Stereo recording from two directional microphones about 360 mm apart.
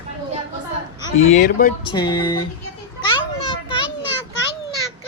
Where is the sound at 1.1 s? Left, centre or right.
Centre.